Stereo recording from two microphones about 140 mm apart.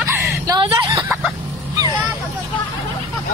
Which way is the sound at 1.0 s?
10° right (ahead or behind).